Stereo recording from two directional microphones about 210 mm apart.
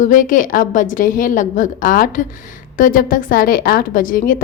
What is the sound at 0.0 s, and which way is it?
A woman's voice, 40° left (ahead or behind).